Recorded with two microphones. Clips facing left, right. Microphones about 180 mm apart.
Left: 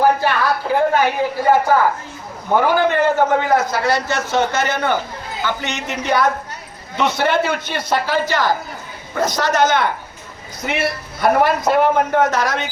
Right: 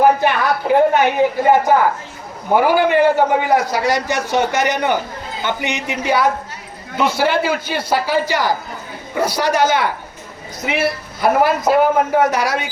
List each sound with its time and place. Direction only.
0.0 s a man's voice: 20° right (ahead or behind)